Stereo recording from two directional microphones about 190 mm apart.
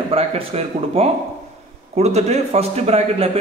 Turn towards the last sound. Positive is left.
turn(degrees=-35)  # may be behind; listen again after turning